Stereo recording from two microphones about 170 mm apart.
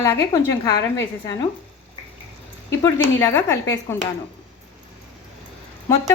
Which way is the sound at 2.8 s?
15° left (ahead or behind).